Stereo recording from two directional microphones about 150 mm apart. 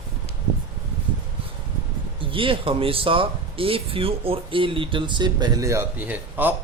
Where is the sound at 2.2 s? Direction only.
35° right (ahead or behind); by 6.5 s 10° right (ahead or behind).